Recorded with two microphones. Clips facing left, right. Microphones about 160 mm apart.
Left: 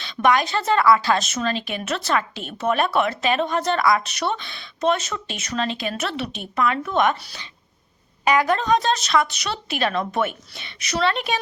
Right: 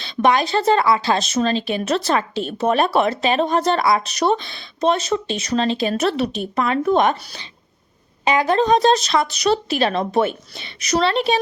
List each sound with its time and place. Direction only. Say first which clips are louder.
0.0 s a woman's voice: right 2 dB; 30° right (ahead or behind)